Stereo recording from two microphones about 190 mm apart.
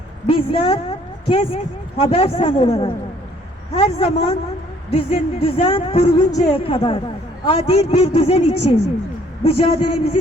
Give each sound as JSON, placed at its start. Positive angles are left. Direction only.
{"t": 0.3, "sound": "a woman's voice", "side_deg": 30}